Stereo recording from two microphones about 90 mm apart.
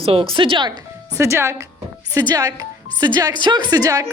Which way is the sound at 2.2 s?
45° right (ahead or behind).